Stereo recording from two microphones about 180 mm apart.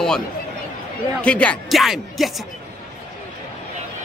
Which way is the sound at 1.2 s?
5° left (ahead or behind).